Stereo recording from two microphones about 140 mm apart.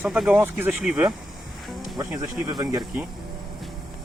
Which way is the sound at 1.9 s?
25° right (ahead or behind).